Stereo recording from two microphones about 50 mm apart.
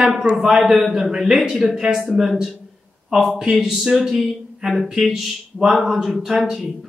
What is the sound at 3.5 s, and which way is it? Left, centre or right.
Speech, centre.